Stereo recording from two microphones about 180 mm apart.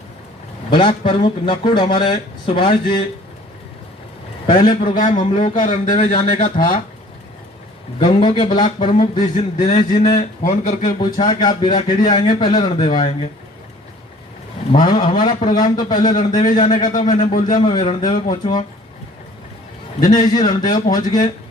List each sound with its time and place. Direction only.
0.7 s speech: 25° left (ahead or behind)
4.4 s a man's voice: 25° left (ahead or behind)
4.9 s speech: 40° left (ahead or behind)
7.9 s speech: 30° left (ahead or behind)
10.4 s speech: 40° left (ahead or behind)
11.0 s a man's voice: 25° left (ahead or behind)
14.7 s a man's voice: 30° left (ahead or behind)
16.8 s speech: 45° left (ahead or behind)
17.6 s speech: 25° left (ahead or behind)
20.0 s speech: 25° left (ahead or behind)